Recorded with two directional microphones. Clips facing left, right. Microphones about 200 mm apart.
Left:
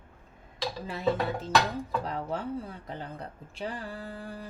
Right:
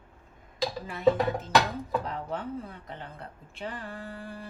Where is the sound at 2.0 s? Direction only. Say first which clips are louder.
Left 1 dB; 35° left (ahead or behind).